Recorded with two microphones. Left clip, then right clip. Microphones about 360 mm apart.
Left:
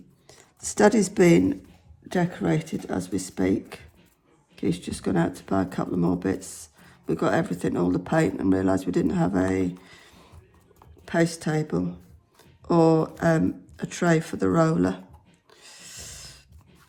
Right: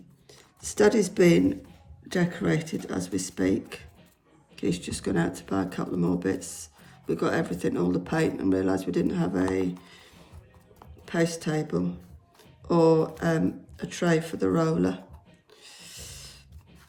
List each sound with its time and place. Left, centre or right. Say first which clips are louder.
0.3 s speech: left 3 dB; centre
9.8 s a sound: left 1 dB; centre
11.0 s speech: left 3 dB; centre
15.6 s dog: left 2 dB; centre